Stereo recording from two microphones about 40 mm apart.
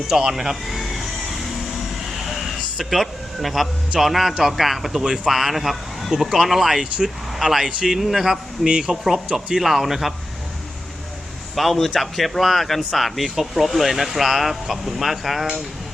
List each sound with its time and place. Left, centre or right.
0.1 s vehicle: centre
4.0 s speech: centre
8.6 s speech: right
8.9 s speech: centre
11.5 s speech: centre